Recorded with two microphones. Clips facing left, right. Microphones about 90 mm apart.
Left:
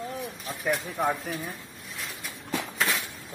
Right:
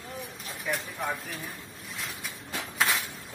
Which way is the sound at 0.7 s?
50° left (ahead or behind).